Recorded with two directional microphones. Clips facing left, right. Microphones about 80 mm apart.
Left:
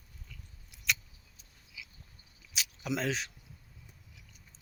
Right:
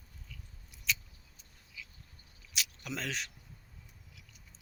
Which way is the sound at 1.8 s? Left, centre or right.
Centre.